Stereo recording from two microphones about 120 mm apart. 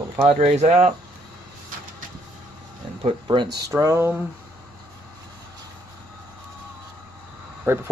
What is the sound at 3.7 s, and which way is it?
Speech, 25° right (ahead or behind).